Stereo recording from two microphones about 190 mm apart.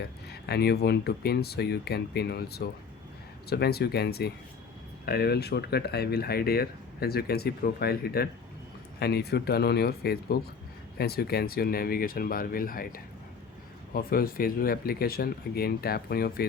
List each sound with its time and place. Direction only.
0.0 s speech: 60° left (ahead or behind)